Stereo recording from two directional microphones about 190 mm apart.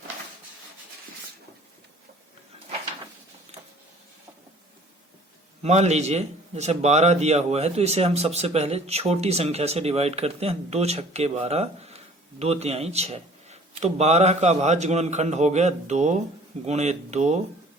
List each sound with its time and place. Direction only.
5.6 s a man's voice: 35° right (ahead or behind)